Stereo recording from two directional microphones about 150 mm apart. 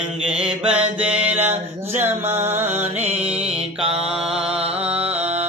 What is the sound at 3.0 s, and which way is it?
Music, 45° right (ahead or behind).